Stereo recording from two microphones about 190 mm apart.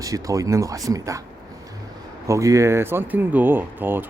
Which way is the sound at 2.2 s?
15° right (ahead or behind).